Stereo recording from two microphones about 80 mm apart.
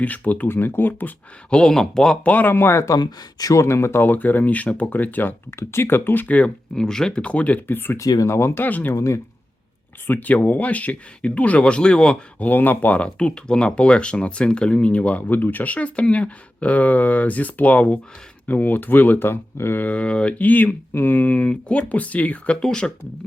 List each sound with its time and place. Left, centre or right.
0.0 s speech: centre
1.5 s speech: centre
2.3 s speech: left
3.0 s speech: left
3.5 s speech: left; by 6.5 s centre
6.7 s speech: centre; by 7.9 s left
7.9 s speech: left
8.3 s speech: left
8.6 s speech: left
9.0 s speech: left
10.1 s speech: left
12.5 s speech: left